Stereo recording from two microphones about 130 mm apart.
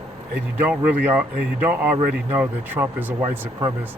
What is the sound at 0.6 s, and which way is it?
Speech, 15° right (ahead or behind).